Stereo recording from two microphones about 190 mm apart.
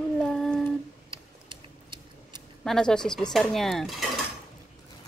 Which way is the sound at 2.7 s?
5° left (ahead or behind).